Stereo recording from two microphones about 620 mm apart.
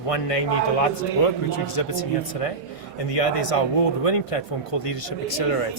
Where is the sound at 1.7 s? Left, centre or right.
Left.